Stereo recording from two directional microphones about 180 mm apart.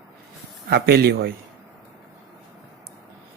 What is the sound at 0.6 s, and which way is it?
Speech, 60° right (ahead or behind).